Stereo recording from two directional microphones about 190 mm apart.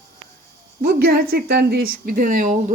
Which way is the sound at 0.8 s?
55° right (ahead or behind).